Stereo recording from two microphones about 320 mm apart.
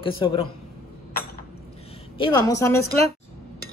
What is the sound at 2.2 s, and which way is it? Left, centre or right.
Speech, centre.